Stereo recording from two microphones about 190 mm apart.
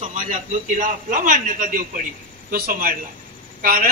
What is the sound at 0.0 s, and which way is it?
A man's voice, 40° right (ahead or behind).